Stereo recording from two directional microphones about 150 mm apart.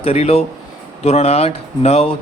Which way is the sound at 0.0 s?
45° left (ahead or behind).